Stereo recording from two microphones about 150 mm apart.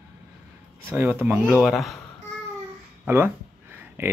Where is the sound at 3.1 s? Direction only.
15° right (ahead or behind).